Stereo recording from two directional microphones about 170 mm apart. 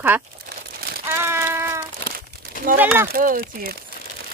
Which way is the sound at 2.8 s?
15° right (ahead or behind).